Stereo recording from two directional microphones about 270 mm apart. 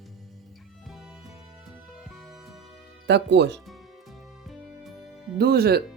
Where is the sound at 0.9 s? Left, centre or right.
Centre.